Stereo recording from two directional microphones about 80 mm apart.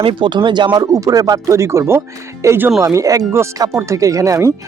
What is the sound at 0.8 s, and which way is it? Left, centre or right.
Speech, right.